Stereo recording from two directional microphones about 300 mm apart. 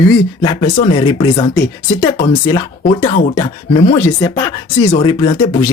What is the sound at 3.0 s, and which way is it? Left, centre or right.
Speech, centre.